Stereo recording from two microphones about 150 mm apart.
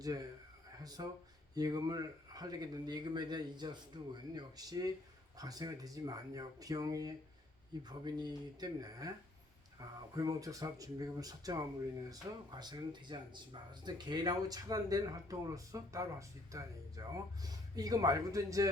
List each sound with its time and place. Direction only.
0.0 s speech: 25° right (ahead or behind)
10.2 s speech: 25° right (ahead or behind)